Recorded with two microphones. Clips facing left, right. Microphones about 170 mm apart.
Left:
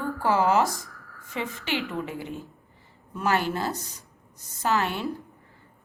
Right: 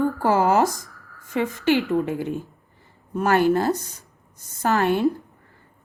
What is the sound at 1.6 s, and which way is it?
A woman's voice, 45° right (ahead or behind).